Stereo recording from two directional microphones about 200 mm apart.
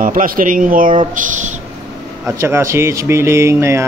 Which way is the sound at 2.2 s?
15° right (ahead or behind).